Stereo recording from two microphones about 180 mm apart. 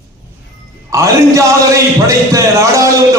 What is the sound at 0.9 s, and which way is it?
A man's voice, 15° right (ahead or behind).